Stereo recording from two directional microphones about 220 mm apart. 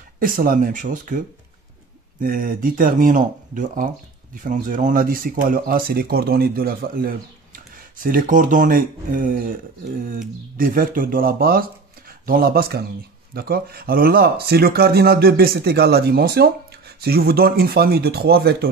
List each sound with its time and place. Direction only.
0.2 s speech: 40° right (ahead or behind)